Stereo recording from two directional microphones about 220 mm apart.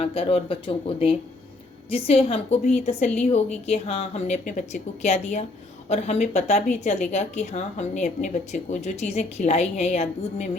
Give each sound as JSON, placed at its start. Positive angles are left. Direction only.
{"t": 0.0, "sound": "a woman's voice", "side_deg": 25}